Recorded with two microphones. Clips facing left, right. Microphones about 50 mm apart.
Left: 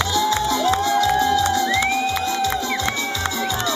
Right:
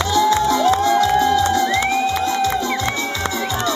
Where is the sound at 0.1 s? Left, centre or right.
Right.